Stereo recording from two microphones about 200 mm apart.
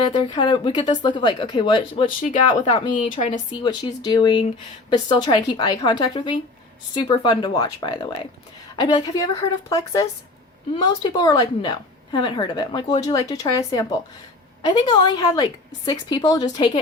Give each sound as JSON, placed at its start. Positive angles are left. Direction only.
{"t": 0.1, "sound": "a woman's voice", "side_deg": 25}
{"t": 3.1, "sound": "speech", "side_deg": 35}
{"t": 3.5, "sound": "a woman's voice", "side_deg": 20}